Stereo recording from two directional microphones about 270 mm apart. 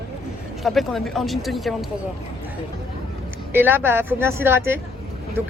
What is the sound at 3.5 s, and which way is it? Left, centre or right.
Speech, centre.